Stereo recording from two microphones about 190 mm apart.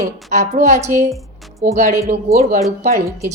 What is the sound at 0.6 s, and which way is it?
Speech, 40° right (ahead or behind).